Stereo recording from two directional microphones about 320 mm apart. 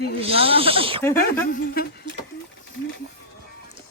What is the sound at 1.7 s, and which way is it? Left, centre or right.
Speech, left.